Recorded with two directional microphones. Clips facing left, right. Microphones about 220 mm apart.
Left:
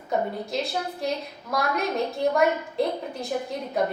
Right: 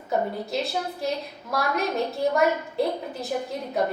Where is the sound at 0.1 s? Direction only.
Centre (ahead or behind).